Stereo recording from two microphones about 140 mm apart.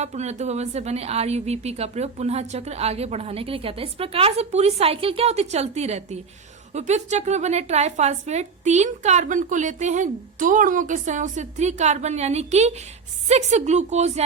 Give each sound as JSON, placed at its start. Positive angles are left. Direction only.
{"t": 0.0, "sound": "a woman's voice", "side_deg": -50}